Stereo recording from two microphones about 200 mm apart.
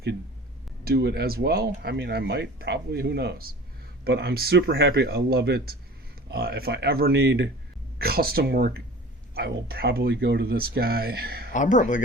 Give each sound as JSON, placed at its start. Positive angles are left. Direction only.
{"t": 0.9, "sound": "speech", "side_deg": -50}
{"t": 4.7, "sound": "speech", "side_deg": -65}
{"t": 11.5, "sound": "speech", "side_deg": 40}